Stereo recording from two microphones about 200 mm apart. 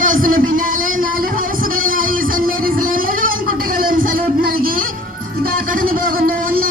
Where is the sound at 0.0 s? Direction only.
40° right (ahead or behind).